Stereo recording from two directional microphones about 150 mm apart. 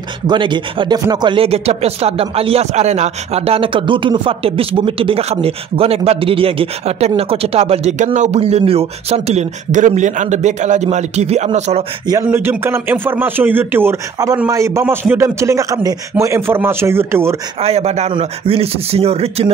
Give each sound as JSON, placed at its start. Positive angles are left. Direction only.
{"t": 0.3, "sound": "speech", "side_deg": -30}
{"t": 12.1, "sound": "a man's voice", "side_deg": -15}
{"t": 17.6, "sound": "speech", "side_deg": -45}